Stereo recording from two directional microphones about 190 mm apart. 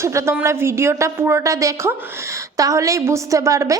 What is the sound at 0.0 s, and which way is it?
Speech, 15° right (ahead or behind).